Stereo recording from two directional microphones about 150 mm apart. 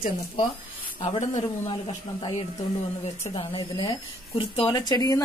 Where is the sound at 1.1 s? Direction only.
35° left (ahead or behind).